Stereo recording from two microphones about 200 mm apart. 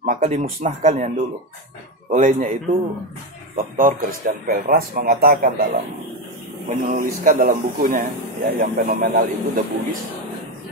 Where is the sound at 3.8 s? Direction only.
45° right (ahead or behind).